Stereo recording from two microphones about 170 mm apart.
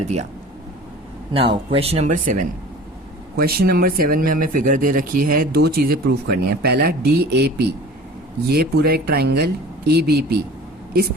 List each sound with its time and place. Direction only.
0.0 s speech: 40° right (ahead or behind)
1.3 s speech: 30° right (ahead or behind); by 2.4 s 50° right (ahead or behind)
3.3 s speech: 65° right (ahead or behind)